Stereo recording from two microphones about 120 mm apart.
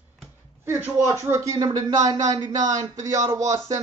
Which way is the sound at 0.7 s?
20° right (ahead or behind).